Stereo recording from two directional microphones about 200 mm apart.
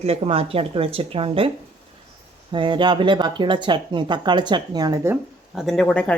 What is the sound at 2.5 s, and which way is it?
Speech, 25° right (ahead or behind).